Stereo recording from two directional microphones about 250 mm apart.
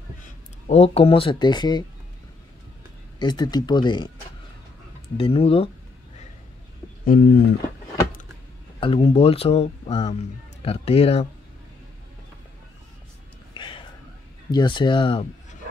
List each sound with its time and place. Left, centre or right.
0.2 s speech: left
3.2 s speech: centre
5.1 s speech: left
7.1 s speech: left
8.7 s speech: left
13.6 s a sound: centre
14.5 s speech: centre